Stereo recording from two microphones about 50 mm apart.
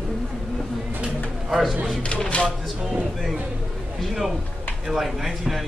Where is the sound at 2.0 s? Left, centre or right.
Centre.